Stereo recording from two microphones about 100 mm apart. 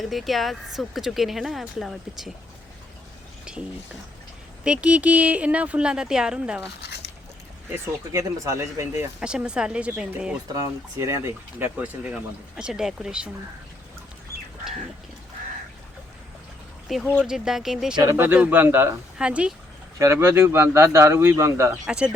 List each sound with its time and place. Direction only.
0.0 s speech: centre (ahead or behind)
4.6 s speech: 10° right (ahead or behind)
7.7 s speech: 30° right (ahead or behind)
9.2 s speech: 10° right (ahead or behind)
10.5 s speech: 40° right (ahead or behind)
11.0 s speech: 30° right (ahead or behind)
11.8 s speech: 10° right (ahead or behind)
17.2 s speech: 5° right (ahead or behind)
17.9 s speech: 40° right (ahead or behind)
18.2 s speech: 20° right (ahead or behind)
19.2 s speech: 10° right (ahead or behind)
20.0 s speech: 25° right (ahead or behind)
21.8 s speech: 10° right (ahead or behind)